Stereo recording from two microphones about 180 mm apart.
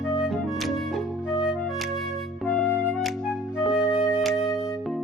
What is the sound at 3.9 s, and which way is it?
Music, 20° left (ahead or behind).